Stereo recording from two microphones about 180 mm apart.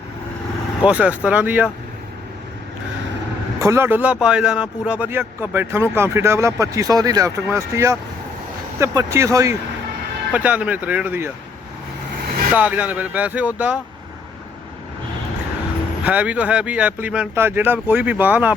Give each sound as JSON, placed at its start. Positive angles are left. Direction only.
{"t": 0.9, "sound": "speech", "side_deg": -5}
{"t": 3.6, "sound": "speech", "side_deg": -15}
{"t": 12.5, "sound": "speech", "side_deg": -10}
{"t": 16.0, "sound": "speech", "side_deg": -10}